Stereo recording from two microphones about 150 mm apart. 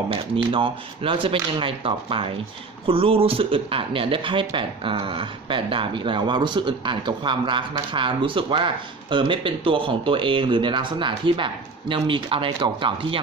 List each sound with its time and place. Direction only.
0.1 s speech: 35° right (ahead or behind)